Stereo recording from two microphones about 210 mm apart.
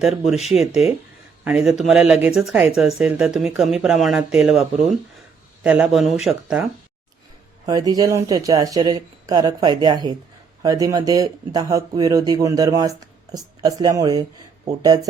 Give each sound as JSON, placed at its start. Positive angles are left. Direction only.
{"t": 0.0, "sound": "speech", "side_deg": 0}
{"t": 7.7, "sound": "speech", "side_deg": -15}